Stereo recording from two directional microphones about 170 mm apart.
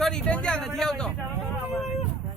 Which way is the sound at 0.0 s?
5° left (ahead or behind).